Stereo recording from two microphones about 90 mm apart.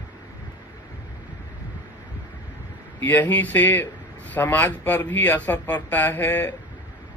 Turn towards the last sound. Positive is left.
turn(degrees=25)  # may be behind; listen again after turning